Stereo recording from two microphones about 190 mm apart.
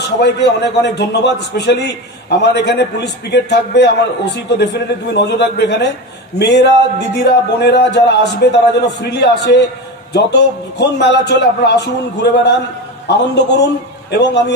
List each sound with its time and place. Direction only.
0.2 s a man's voice: 60° left (ahead or behind)